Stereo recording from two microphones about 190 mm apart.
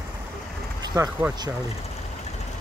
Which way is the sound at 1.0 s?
10° right (ahead or behind).